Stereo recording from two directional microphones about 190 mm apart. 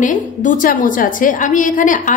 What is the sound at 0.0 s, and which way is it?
A woman's voice, 40° left (ahead or behind).